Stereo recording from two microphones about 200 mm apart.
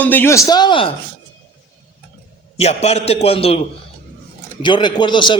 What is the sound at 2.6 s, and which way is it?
A man's voice, 30° left (ahead or behind).